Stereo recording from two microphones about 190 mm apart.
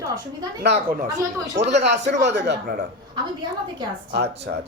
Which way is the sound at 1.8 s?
65° right (ahead or behind).